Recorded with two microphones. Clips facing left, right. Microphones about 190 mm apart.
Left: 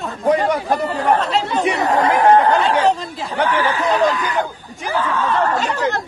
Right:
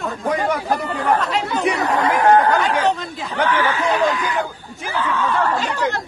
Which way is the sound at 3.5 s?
35° left (ahead or behind).